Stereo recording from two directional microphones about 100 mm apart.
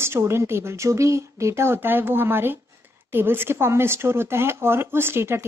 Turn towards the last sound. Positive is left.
turn(degrees=-25)  # may be behind; listen again after turning